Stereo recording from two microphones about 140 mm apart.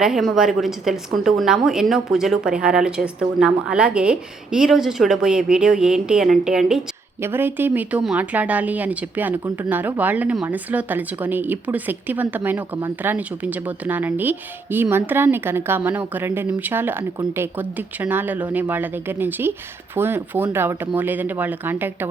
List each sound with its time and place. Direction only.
0.0 s a woman's voice: centre (ahead or behind)
7.2 s a woman's voice: 15° right (ahead or behind)